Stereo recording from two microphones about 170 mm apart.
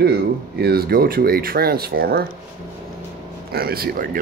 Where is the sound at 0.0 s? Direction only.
70° right (ahead or behind).